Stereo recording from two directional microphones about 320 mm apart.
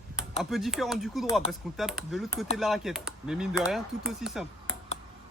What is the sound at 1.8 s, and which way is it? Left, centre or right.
Speech, centre.